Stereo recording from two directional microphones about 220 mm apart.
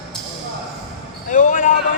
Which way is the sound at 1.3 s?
35° left (ahead or behind).